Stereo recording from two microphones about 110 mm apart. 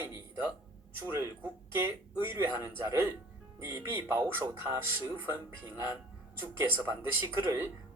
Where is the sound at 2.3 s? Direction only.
25° right (ahead or behind).